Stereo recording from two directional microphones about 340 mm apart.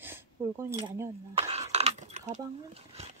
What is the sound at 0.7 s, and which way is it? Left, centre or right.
Chink, centre.